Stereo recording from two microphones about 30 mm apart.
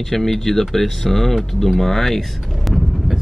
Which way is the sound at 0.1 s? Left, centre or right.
Centre.